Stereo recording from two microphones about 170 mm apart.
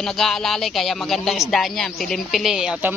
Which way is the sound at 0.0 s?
Centre (ahead or behind).